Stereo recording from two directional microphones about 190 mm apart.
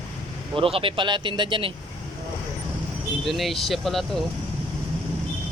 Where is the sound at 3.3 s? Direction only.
Centre (ahead or behind).